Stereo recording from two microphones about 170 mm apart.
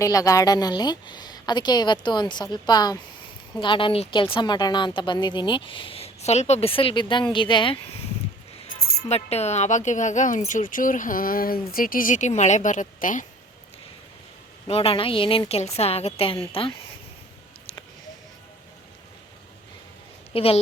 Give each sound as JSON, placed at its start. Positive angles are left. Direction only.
{"t": 0.0, "sound": "a woman's voice", "side_deg": 20}
{"t": 9.0, "sound": "speech", "side_deg": 40}
{"t": 14.7, "sound": "a woman's voice", "side_deg": 35}
{"t": 20.3, "sound": "a woman's voice", "side_deg": 35}